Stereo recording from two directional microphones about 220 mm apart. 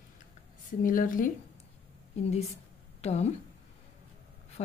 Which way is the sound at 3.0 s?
30° left (ahead or behind).